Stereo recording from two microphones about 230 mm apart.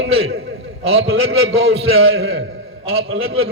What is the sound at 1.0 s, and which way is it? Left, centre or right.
A man's voice, right.